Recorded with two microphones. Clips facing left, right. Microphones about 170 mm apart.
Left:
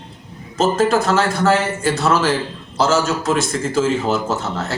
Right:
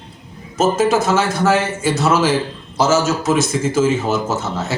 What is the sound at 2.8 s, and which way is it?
A man's voice, centre (ahead or behind).